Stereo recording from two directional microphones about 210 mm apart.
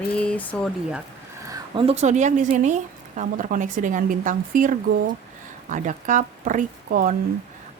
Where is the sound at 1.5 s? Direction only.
25° right (ahead or behind); by 7.1 s 40° right (ahead or behind).